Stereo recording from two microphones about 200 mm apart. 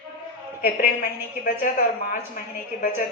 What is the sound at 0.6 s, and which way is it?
A woman's voice, 45° left (ahead or behind).